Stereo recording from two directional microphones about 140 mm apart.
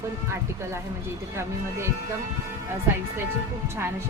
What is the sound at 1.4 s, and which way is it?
Speech, 20° right (ahead or behind).